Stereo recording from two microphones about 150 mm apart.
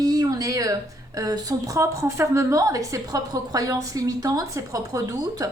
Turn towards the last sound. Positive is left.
turn(degrees=-25)  # may be behind; listen again after turning